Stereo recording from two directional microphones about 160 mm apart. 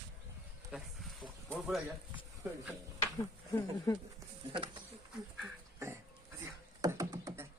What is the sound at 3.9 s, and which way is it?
Speech, 25° left (ahead or behind).